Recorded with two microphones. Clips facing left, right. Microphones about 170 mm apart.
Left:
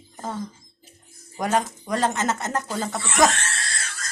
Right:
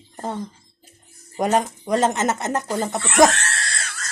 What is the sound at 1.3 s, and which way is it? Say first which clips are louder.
Speech: right 3 dB; 20° right (ahead or behind).